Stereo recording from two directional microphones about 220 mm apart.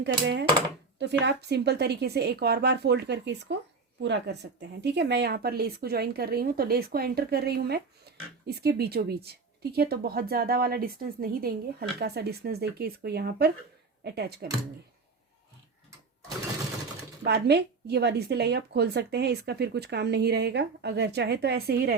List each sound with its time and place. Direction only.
0.0 s speech: 50° right (ahead or behind)
17.2 s speech: 50° right (ahead or behind)